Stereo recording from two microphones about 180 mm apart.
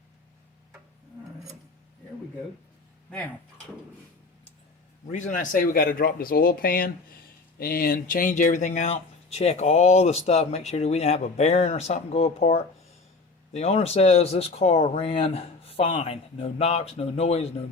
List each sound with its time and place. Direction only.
5.1 s speech: 45° left (ahead or behind)